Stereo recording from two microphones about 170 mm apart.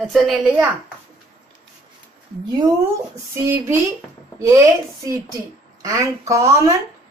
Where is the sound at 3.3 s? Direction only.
15° right (ahead or behind).